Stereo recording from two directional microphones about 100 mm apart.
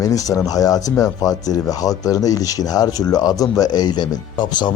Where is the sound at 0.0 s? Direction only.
35° left (ahead or behind).